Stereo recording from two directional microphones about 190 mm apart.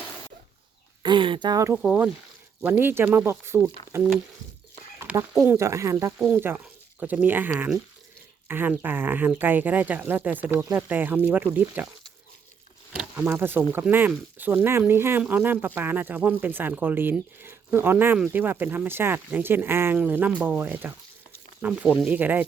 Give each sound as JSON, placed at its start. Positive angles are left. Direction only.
{"t": 1.0, "sound": "speech", "side_deg": -25}
{"t": 13.0, "sound": "speech", "side_deg": -10}